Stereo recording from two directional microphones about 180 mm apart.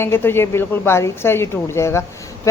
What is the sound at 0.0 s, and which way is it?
A woman's voice, 15° left (ahead or behind).